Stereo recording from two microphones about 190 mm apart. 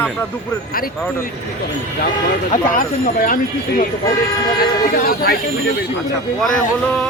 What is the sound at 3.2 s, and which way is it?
Speech, 45° left (ahead or behind).